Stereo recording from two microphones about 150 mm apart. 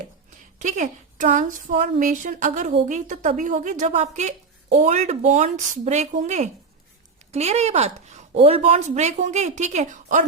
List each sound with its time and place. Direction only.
0.6 s a woman's voice: 60° right (ahead or behind)